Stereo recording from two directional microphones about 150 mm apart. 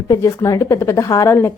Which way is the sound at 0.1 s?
20° left (ahead or behind).